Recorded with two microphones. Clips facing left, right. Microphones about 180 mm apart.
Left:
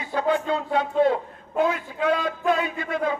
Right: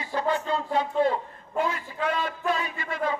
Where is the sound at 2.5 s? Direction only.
55° left (ahead or behind).